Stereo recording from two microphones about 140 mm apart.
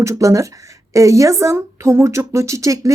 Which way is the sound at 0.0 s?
25° right (ahead or behind).